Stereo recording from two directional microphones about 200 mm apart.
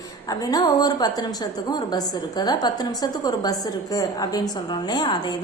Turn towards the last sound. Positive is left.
turn(degrees=20)  # may be behind; listen again after turning